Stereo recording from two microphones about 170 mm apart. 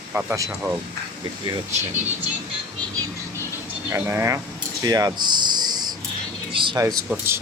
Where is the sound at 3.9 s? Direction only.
15° right (ahead or behind).